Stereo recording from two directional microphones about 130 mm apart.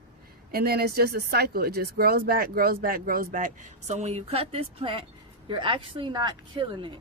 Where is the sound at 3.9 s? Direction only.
60° right (ahead or behind).